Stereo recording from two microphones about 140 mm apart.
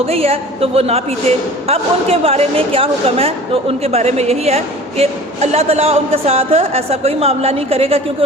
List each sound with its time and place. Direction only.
0.0 s a woman's voice: 45° right (ahead or behind)